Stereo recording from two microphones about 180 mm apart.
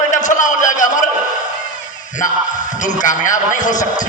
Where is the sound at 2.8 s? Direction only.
45° left (ahead or behind).